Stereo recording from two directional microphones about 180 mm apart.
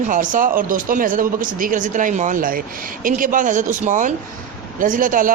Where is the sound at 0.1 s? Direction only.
45° right (ahead or behind).